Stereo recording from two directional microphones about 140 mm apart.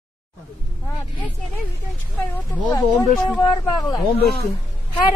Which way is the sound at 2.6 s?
30° left (ahead or behind).